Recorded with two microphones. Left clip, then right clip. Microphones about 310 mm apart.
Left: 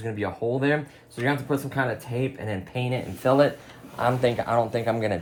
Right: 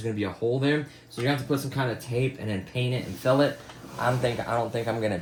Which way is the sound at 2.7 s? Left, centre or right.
Left.